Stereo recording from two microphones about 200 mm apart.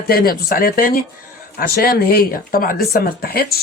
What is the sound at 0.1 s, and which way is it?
Speech, 50° left (ahead or behind).